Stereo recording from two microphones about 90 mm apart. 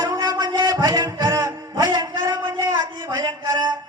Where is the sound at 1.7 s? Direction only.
50° right (ahead or behind).